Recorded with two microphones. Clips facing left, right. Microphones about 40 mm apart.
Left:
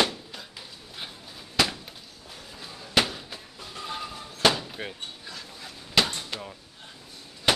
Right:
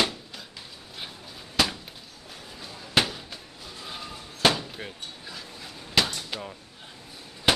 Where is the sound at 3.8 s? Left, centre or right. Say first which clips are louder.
Left 4 dB; centre.